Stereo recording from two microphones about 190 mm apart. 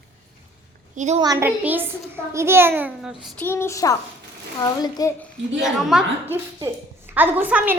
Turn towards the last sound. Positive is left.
turn(degrees=-10)  # may be behind; listen again after turning